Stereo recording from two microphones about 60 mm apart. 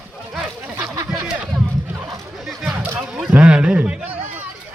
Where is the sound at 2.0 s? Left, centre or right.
Centre.